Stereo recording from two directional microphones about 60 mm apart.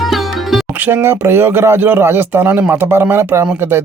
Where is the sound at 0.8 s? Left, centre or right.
Right.